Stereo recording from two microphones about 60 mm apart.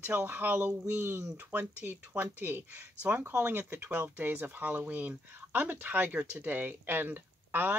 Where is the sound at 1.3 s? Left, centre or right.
Right.